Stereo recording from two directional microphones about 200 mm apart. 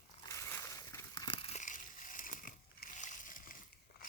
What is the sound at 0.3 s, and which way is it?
Crushing, 15° left (ahead or behind).